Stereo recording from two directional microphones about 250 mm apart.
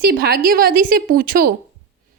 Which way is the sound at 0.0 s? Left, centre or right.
Right.